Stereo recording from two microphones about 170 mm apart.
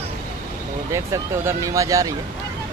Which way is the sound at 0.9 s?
15° right (ahead or behind).